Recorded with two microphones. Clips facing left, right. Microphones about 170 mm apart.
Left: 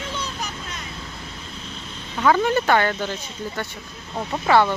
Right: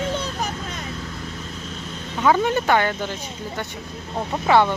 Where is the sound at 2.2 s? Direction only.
20° right (ahead or behind).